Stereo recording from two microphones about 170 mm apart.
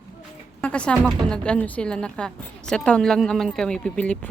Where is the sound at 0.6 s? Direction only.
5° left (ahead or behind).